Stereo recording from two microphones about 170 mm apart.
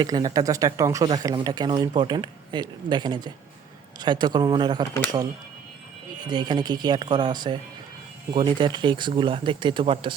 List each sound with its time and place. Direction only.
0.0 s speech: 25° right (ahead or behind)